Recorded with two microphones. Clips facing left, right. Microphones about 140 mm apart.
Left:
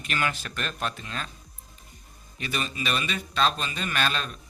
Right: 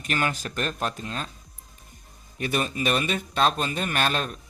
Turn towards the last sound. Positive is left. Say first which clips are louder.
# right 3 dB
turn(degrees=-50)  # may be behind; listen again after turning